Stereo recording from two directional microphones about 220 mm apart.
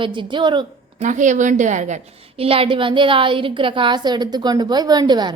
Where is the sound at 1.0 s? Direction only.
35° right (ahead or behind).